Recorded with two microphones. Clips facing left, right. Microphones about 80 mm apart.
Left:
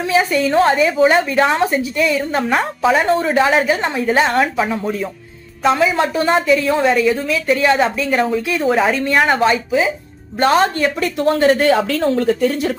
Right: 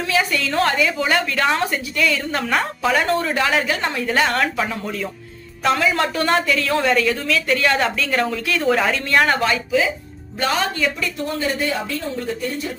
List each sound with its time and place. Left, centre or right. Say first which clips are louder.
0.1 s a woman's voice: left 6 dB; left
9.5 s a woman's voice: left 3 dB; left
10.4 s speech: left 7 dB; left
11.2 s speech: left 11 dB; left